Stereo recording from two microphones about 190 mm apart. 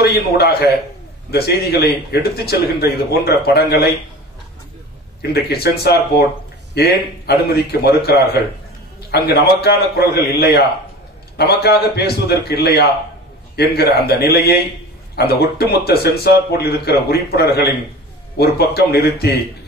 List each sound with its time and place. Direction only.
0.0 s speech: 55° left (ahead or behind)
5.2 s speech: 55° left (ahead or behind)